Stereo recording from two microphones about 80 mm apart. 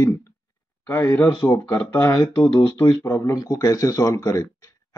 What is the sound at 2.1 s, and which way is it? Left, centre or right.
Speech, left.